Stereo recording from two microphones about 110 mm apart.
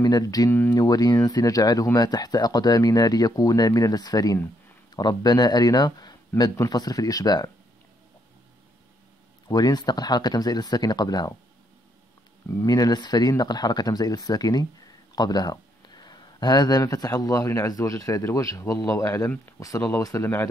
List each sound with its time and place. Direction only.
0.0 s speech: 35° left (ahead or behind)
0.5 s speech: 20° left (ahead or behind)
0.7 s speech: 35° left (ahead or behind)
9.5 s speech: 35° left (ahead or behind)
12.4 s speech: 30° left (ahead or behind)